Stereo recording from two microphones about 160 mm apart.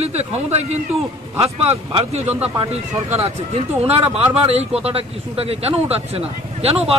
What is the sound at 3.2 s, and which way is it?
Speech, 40° right (ahead or behind).